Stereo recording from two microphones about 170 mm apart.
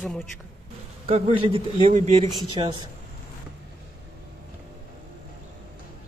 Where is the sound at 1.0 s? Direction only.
40° right (ahead or behind).